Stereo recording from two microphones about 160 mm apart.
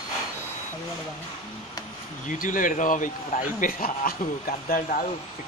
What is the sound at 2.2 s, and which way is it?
A man's voice, 55° left (ahead or behind).